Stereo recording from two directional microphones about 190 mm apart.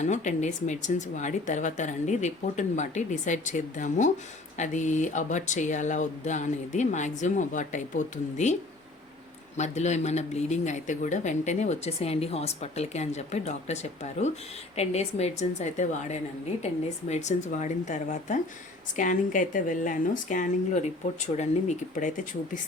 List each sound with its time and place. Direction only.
0.0 s speech: 40° left (ahead or behind)
9.6 s speech: 35° left (ahead or behind)